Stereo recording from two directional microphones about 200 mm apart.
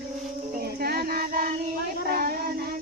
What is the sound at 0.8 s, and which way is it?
Child singing, 50° right (ahead or behind).